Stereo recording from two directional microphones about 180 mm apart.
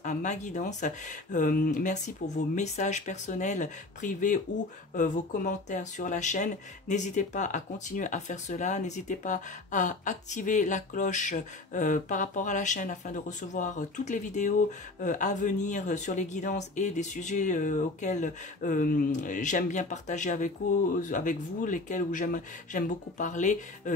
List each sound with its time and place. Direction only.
0.0 s speech: 45° left (ahead or behind)